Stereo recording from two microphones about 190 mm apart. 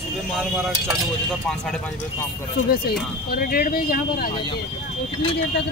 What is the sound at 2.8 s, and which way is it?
Speech, 50° left (ahead or behind).